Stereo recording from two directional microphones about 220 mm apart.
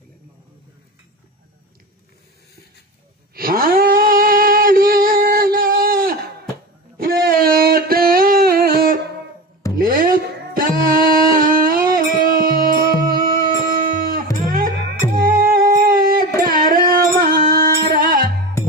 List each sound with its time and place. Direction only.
3.3 s cat: 40° right (ahead or behind)
7.0 s a sound: 40° right (ahead or behind)
9.6 s music: 15° left (ahead or behind)
10.1 s singing: 40° right (ahead or behind)
13.1 s a sound: 40° right (ahead or behind)
14.5 s music: 45° right (ahead or behind)